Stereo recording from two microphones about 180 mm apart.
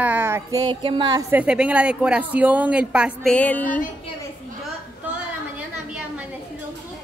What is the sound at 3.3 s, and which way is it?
Music, 10° left (ahead or behind).